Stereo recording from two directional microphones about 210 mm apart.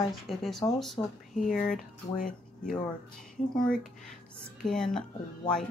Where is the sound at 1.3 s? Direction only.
5° left (ahead or behind).